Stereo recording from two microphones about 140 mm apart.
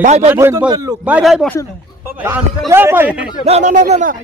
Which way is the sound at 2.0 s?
15° right (ahead or behind).